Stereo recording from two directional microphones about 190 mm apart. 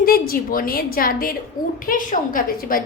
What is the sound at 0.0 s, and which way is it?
A woman's voice, 50° left (ahead or behind).